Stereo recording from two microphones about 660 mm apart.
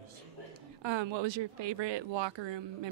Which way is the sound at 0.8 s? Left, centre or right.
Right.